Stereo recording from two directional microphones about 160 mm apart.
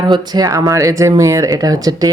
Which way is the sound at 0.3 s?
25° right (ahead or behind).